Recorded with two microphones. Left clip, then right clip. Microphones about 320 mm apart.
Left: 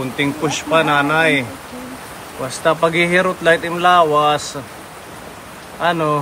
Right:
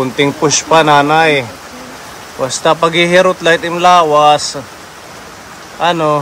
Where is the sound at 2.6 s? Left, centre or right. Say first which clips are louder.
Right 4 dB; centre.